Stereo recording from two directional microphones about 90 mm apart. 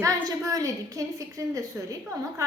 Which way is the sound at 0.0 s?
35° right (ahead or behind).